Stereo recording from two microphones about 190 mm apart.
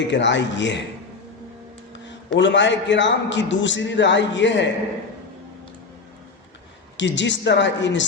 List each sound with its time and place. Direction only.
0.1 s a man's voice: 70° left (ahead or behind)
2.0 s a man's voice: 70° left (ahead or behind)
6.9 s a man's voice: 70° left (ahead or behind)